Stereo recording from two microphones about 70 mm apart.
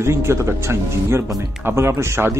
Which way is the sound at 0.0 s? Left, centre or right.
Right.